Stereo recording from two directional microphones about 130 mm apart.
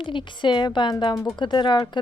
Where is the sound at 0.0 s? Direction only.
40° left (ahead or behind).